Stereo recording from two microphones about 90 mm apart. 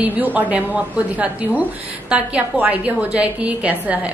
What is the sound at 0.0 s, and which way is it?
A woman's voice, 20° right (ahead or behind).